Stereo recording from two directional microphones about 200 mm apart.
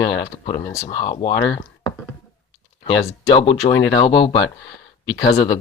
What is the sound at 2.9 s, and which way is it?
Speech, 25° left (ahead or behind).